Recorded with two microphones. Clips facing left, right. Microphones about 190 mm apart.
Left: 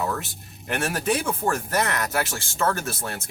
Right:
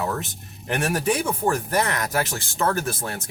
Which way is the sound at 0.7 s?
15° right (ahead or behind).